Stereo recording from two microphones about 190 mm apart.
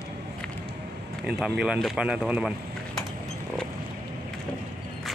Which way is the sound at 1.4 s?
5° right (ahead or behind).